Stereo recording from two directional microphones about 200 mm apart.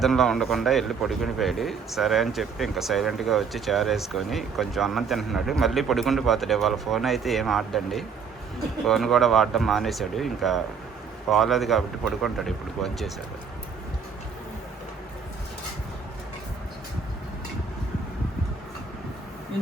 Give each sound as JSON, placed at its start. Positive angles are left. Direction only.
{"t": 0.0, "sound": "a man's voice", "side_deg": 0}